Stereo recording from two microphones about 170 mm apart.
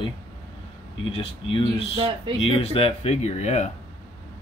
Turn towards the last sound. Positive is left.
turn(degrees=45)  # may be behind; listen again after turning